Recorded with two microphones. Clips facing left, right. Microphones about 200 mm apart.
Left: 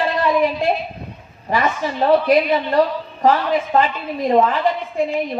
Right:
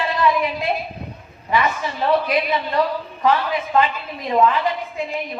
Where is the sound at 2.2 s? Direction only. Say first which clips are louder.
Left 6 dB; 40° left (ahead or behind).